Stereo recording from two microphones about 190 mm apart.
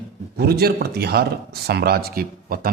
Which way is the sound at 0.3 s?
55° right (ahead or behind).